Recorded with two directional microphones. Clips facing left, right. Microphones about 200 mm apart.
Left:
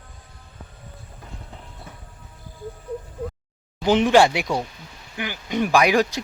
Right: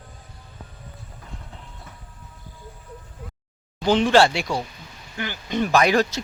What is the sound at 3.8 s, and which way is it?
A man's voice, 15° left (ahead or behind).